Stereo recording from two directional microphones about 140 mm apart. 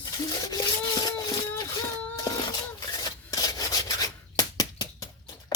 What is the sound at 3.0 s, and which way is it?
Rub, 25° left (ahead or behind).